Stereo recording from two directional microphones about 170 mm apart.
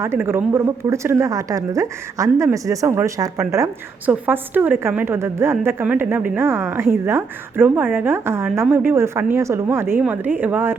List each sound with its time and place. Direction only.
0.0 s a woman's voice: 15° right (ahead or behind)